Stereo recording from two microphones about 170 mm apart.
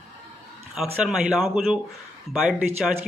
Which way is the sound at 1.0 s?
5° right (ahead or behind).